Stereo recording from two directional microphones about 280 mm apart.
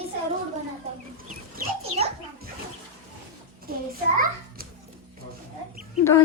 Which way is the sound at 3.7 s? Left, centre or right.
Right.